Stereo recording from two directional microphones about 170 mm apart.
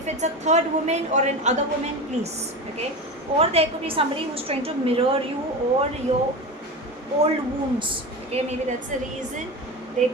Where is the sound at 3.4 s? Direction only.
35° right (ahead or behind).